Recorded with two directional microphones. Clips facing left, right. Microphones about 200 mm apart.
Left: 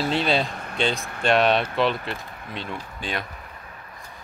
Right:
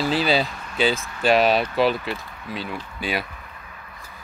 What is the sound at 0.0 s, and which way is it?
Speech, centre (ahead or behind).